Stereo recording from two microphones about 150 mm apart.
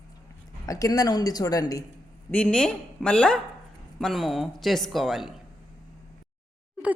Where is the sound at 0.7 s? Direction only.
25° left (ahead or behind).